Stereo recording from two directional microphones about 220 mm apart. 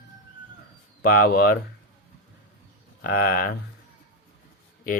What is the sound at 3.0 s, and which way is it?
Speech, 40° left (ahead or behind).